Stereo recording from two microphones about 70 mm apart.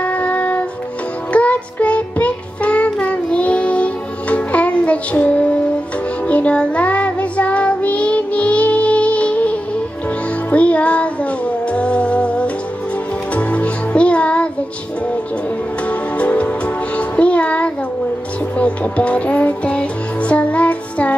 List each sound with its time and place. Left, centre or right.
0.0 s music: centre
1.3 s child singing: centre
10.5 s music: centre
15.9 s music: centre